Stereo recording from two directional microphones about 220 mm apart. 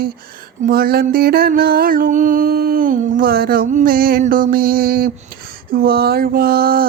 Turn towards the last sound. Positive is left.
turn(degrees=-45)  # may be behind; listen again after turning